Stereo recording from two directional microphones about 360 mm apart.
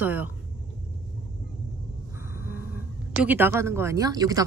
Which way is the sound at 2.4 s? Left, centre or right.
Left.